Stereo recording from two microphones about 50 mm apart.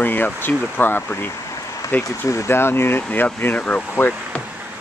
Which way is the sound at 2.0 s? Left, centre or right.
Left.